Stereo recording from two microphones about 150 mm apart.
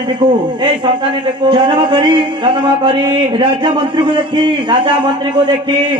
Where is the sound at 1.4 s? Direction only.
35° right (ahead or behind).